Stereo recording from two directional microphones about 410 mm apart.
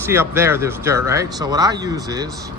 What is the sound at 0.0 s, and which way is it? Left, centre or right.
Speech, centre.